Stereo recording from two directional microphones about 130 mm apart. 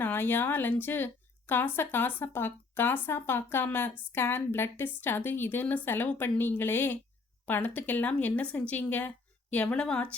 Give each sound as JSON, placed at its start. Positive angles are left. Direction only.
{"t": 0.0, "sound": "a woman's voice", "side_deg": 15}